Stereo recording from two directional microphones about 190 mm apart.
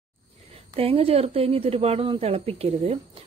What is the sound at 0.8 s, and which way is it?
Speech, 30° right (ahead or behind).